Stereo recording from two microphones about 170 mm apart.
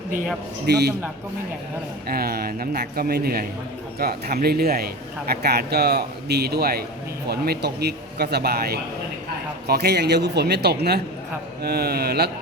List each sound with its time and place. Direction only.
0.7 s speech: 75° right (ahead or behind)
2.0 s a man's voice: 65° right (ahead or behind)